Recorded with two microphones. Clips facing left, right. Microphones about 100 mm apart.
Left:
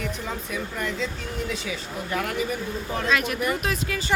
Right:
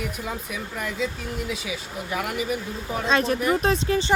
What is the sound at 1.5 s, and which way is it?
A woman's voice, 5° right (ahead or behind).